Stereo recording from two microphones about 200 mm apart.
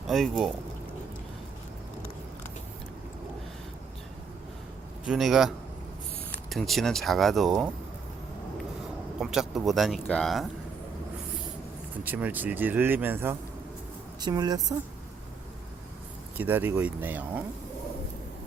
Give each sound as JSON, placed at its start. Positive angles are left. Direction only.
{"t": 0.1, "sound": "speech", "side_deg": 0}
{"t": 5.0, "sound": "speech", "side_deg": 0}
{"t": 6.5, "sound": "speech", "side_deg": 0}
{"t": 9.1, "sound": "speech", "side_deg": 0}
{"t": 12.0, "sound": "a woman's voice", "side_deg": -10}
{"t": 16.4, "sound": "speech", "side_deg": -10}